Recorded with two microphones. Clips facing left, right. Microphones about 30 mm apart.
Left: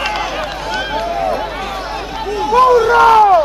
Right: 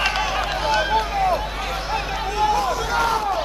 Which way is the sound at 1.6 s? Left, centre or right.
Centre.